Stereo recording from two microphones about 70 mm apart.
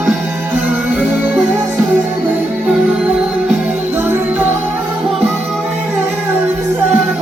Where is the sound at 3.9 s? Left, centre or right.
Right.